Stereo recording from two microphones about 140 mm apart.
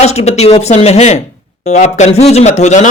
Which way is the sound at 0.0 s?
50° left (ahead or behind).